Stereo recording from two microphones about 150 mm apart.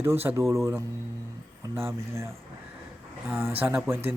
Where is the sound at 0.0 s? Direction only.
15° right (ahead or behind).